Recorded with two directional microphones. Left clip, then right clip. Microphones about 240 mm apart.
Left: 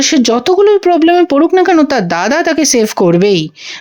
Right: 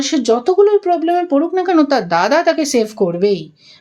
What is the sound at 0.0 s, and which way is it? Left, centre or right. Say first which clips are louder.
Speech: left 4 dB; left.